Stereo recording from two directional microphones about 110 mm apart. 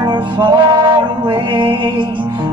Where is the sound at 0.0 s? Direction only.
45° right (ahead or behind).